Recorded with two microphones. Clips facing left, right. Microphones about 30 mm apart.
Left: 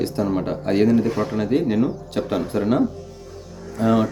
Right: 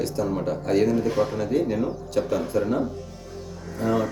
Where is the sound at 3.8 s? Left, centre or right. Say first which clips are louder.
Left 5 dB; left.